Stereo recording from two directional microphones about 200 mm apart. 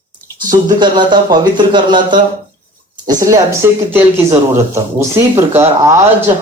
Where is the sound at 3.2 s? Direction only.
15° right (ahead or behind).